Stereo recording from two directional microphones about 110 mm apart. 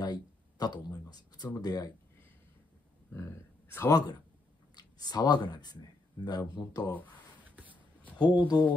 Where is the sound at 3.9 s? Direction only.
40° left (ahead or behind).